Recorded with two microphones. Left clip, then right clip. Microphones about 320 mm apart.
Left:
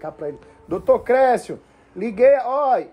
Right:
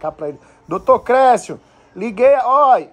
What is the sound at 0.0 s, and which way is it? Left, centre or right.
A man's voice, right.